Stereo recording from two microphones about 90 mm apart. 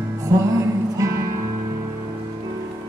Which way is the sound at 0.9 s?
40° right (ahead or behind).